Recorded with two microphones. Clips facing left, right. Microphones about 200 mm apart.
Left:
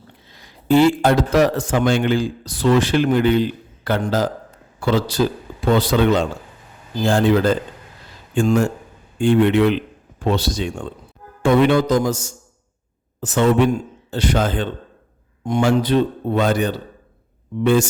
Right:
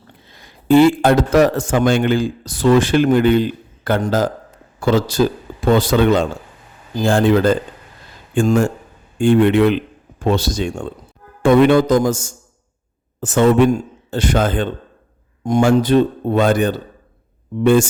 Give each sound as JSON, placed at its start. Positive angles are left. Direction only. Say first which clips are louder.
{"t": 0.3, "sound": "a man's voice", "louder": "right 3 dB", "side_deg": -50}